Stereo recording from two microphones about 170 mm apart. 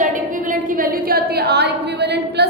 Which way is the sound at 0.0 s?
50° right (ahead or behind).